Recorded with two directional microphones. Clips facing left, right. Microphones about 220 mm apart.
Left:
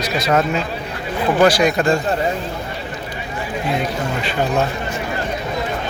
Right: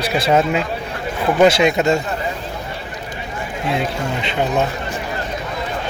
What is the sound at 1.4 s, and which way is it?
Speech, 25° right (ahead or behind).